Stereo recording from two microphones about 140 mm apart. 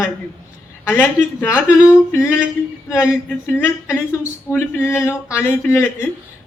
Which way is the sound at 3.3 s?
15° left (ahead or behind).